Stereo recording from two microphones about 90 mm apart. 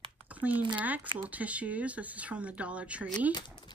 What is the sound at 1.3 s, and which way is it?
Speech, 15° right (ahead or behind).